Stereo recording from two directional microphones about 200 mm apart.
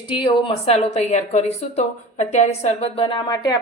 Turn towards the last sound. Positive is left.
turn(degrees=20)  # may be behind; listen again after turning